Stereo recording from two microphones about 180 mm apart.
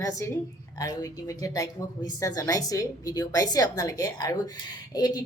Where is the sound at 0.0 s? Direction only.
15° left (ahead or behind).